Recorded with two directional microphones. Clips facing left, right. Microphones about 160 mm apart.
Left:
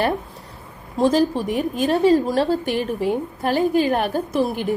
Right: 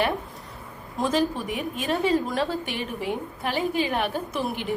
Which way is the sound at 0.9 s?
35° left (ahead or behind).